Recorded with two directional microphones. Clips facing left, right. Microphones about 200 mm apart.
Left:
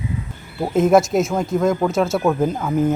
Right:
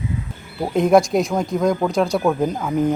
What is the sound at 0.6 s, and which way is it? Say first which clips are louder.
Speech: even; centre (ahead or behind).